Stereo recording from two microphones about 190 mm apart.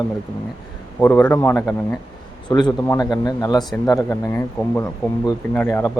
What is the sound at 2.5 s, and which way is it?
Speech, 20° left (ahead or behind).